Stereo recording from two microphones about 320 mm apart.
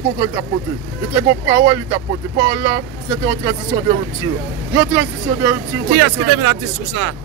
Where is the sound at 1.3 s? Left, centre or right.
Centre.